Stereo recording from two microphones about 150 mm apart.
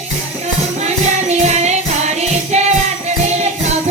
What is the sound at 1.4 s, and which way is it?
Music, 50° right (ahead or behind).